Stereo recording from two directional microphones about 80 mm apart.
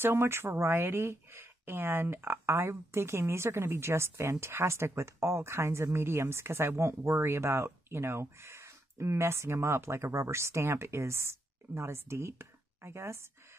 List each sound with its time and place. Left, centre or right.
0.0 s speech: right